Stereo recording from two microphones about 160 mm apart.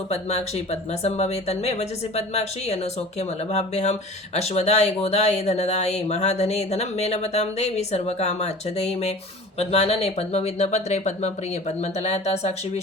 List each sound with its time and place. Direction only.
0.1 s speech: 40° left (ahead or behind)